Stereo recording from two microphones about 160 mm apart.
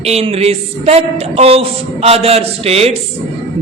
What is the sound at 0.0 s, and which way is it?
A woman's voice, 40° right (ahead or behind).